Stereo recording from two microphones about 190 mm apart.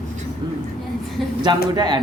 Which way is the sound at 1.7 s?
20° right (ahead or behind).